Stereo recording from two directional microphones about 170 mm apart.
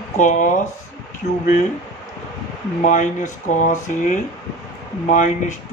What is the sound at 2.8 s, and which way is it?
Speech, 50° left (ahead or behind).